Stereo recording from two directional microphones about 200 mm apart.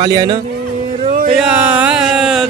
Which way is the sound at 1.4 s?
5° right (ahead or behind).